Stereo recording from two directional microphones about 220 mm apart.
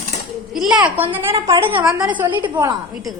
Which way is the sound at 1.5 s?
15° right (ahead or behind).